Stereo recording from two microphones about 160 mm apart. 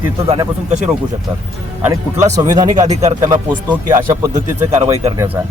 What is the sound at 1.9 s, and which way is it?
Speech, 20° right (ahead or behind).